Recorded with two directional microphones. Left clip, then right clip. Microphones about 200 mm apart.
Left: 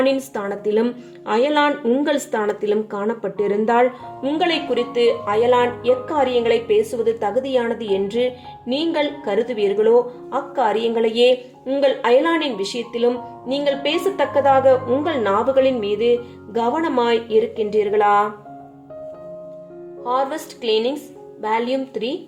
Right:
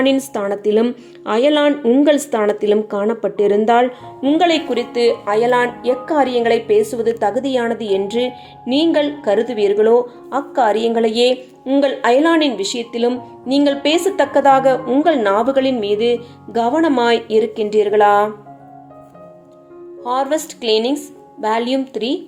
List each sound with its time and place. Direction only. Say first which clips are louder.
0.0 s a woman's voice: right 3 dB; 35° right (ahead or behind)
20.1 s a woman's voice: right 3 dB; 40° right (ahead or behind)